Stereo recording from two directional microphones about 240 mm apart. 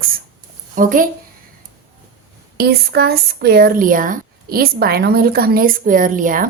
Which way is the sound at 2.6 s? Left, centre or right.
Right.